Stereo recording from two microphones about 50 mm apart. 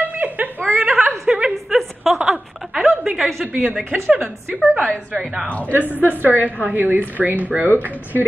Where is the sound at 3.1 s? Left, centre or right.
Centre.